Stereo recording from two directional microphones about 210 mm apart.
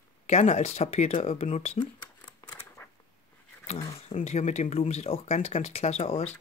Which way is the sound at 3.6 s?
30° left (ahead or behind).